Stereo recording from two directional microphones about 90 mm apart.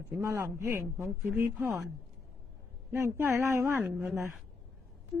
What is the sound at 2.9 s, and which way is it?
Speech, 30° right (ahead or behind).